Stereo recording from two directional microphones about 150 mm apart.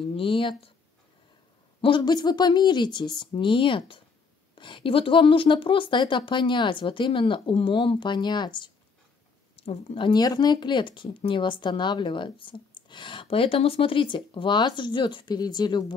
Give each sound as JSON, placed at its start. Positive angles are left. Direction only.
{"t": 0.1, "sound": "speech", "side_deg": 35}
{"t": 1.8, "sound": "speech", "side_deg": 35}
{"t": 9.6, "sound": "speech", "side_deg": 40}